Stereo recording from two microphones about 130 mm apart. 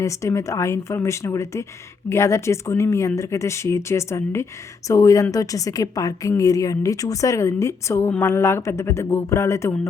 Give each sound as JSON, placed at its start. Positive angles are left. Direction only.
{"t": 0.0, "sound": "a woman's voice", "side_deg": 25}